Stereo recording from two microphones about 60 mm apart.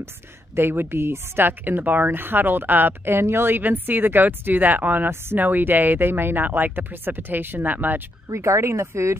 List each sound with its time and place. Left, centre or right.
0.6 s speech: right
8.3 s speech: right